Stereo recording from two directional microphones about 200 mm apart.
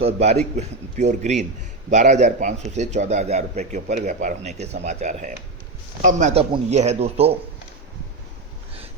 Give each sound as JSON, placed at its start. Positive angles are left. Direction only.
{"t": 0.0, "sound": "a man's voice", "side_deg": -30}